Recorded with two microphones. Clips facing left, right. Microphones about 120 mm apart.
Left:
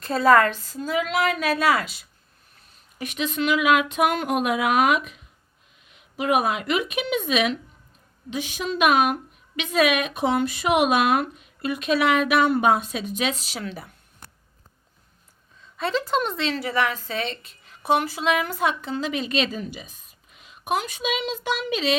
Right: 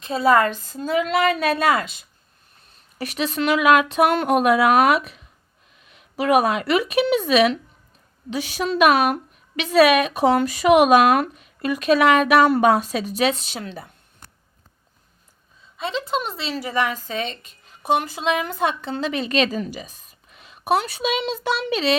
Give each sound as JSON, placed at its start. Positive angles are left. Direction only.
{"t": 0.0, "sound": "a woman's voice", "side_deg": -5}
{"t": 0.7, "sound": "a woman's voice", "side_deg": -40}
{"t": 3.0, "sound": "speech", "side_deg": -40}
{"t": 15.8, "sound": "a woman's voice", "side_deg": 0}